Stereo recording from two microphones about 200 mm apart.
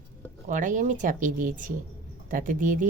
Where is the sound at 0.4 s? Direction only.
40° right (ahead or behind).